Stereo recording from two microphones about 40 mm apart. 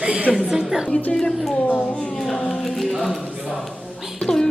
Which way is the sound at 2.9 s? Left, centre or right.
Centre.